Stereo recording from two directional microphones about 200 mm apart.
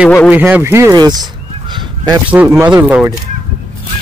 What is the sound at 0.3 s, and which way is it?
Speech, 10° right (ahead or behind).